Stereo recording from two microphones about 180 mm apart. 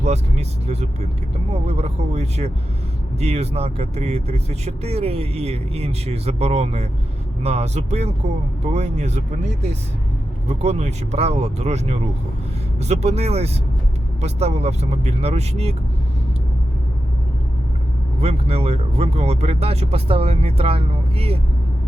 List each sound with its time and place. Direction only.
0.0 s speech: 35° right (ahead or behind)
18.2 s speech: 35° right (ahead or behind)